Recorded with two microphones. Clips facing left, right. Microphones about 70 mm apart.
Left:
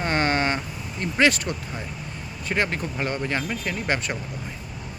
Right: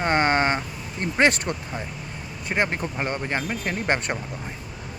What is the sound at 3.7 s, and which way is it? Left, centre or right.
Speech, right.